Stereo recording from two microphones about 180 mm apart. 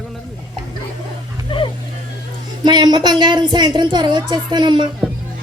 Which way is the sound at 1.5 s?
30° left (ahead or behind).